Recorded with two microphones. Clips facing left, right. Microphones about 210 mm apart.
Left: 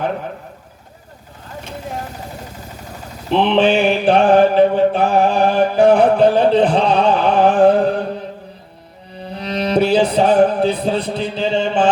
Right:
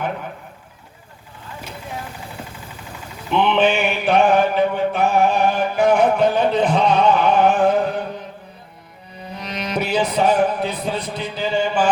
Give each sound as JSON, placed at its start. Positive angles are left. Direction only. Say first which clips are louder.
{"t": 1.5, "sound": "vehicle", "louder": "left 4 dB", "side_deg": 40}
{"t": 9.3, "sound": "music", "louder": "left 8 dB", "side_deg": 30}